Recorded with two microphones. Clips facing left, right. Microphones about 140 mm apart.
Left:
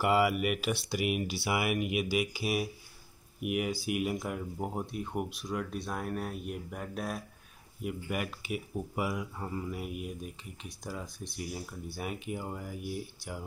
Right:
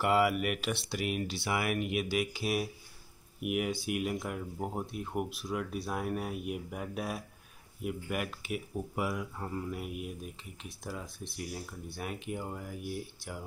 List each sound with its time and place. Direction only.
0.0 s speech: centre (ahead or behind)